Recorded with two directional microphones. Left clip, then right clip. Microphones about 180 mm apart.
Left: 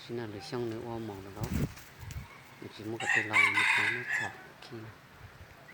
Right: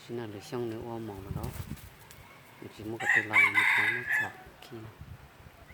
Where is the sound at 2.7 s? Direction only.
Centre (ahead or behind).